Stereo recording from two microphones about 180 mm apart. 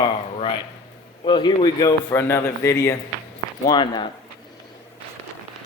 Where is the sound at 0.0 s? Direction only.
30° left (ahead or behind).